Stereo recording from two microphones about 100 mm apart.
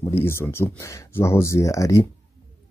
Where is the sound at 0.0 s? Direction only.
25° left (ahead or behind).